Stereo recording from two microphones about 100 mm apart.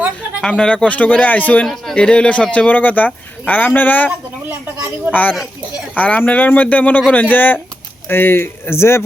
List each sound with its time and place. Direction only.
0.4 s speech: 10° left (ahead or behind)
1.6 s speech: 5° left (ahead or behind)
5.1 s speech: 15° right (ahead or behind)
6.0 s speech: 15° left (ahead or behind)